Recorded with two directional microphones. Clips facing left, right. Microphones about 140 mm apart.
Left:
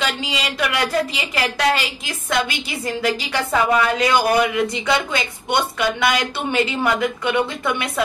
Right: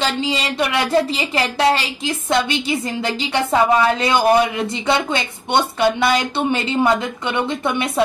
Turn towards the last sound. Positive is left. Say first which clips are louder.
# right 3 dB
turn(degrees=-25)  # may be behind; listen again after turning